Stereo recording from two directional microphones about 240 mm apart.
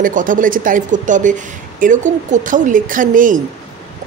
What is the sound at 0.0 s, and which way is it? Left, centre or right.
Speech, right.